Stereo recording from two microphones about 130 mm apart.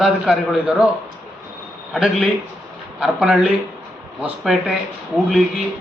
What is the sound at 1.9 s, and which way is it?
A man's voice, centre (ahead or behind).